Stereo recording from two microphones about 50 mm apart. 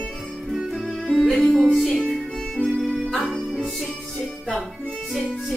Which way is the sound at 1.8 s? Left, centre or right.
Centre.